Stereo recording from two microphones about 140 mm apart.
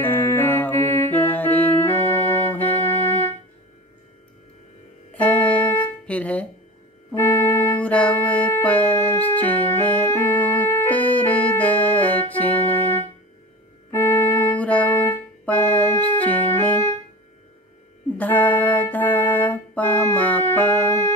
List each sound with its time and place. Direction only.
0.0 s music: 15° left (ahead or behind)
5.1 s music: 10° left (ahead or behind)
18.1 s music: 10° left (ahead or behind)